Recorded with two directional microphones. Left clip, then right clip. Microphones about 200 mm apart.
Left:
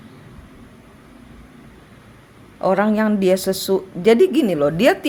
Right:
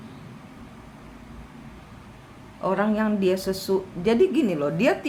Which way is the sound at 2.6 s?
45° left (ahead or behind).